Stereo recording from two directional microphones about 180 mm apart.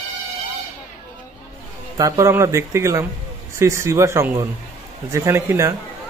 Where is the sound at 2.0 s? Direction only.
15° right (ahead or behind).